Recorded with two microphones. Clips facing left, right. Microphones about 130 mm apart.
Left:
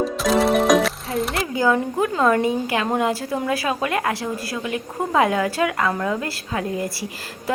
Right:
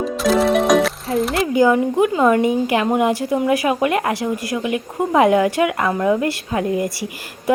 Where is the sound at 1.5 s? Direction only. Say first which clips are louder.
Right 5 dB; 20° right (ahead or behind).